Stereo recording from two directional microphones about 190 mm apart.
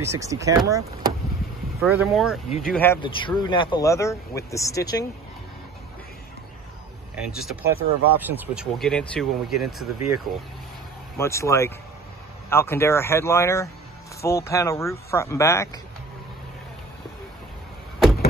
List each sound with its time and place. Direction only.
0.0 s speech: 15° right (ahead or behind)
1.8 s speech: centre (ahead or behind)
3.0 s speech: 25° left (ahead or behind)
7.2 s speech: 5° right (ahead or behind)
8.7 s speech: 5° left (ahead or behind)
11.1 s speech: 15° left (ahead or behind)